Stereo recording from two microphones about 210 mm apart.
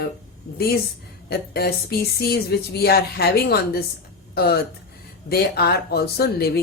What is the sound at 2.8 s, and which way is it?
A woman's voice, 45° left (ahead or behind).